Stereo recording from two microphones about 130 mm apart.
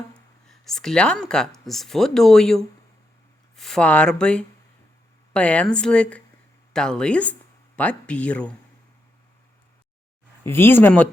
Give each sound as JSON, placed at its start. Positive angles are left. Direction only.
{"t": 0.4, "sound": "speech", "side_deg": 5}
{"t": 10.4, "sound": "speech", "side_deg": 20}